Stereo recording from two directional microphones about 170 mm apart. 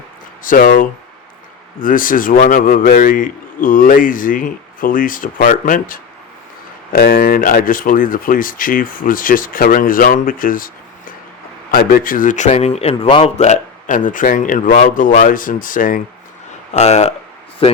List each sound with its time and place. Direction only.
0.4 s a man's voice: 55° left (ahead or behind)
11.7 s a man's voice: 60° left (ahead or behind)
16.7 s speech: 40° left (ahead or behind)